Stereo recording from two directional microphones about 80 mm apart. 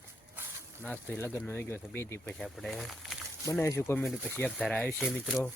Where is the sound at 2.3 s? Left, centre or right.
Centre.